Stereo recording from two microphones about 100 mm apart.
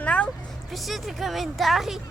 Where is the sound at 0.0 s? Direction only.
10° left (ahead or behind).